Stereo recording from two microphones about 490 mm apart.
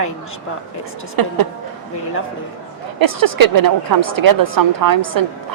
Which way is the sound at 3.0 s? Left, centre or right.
Right.